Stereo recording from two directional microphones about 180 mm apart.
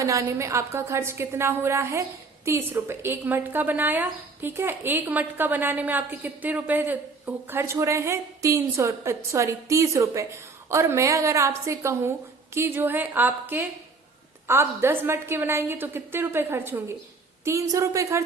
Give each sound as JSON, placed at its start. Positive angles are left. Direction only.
{"t": 0.0, "sound": "a woman's voice", "side_deg": -15}